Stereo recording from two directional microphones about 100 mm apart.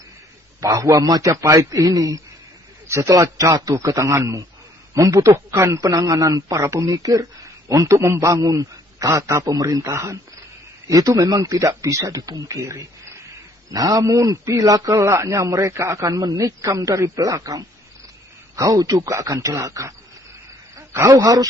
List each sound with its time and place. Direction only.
0.6 s a man's voice: 35° right (ahead or behind)
20.7 s cricket: 25° right (ahead or behind)